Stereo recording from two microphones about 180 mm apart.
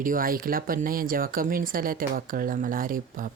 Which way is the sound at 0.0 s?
50° right (ahead or behind).